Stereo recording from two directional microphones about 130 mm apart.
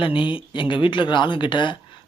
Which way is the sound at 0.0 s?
40° left (ahead or behind).